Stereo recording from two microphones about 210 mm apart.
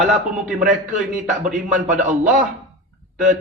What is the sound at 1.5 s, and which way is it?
Speech, 35° right (ahead or behind).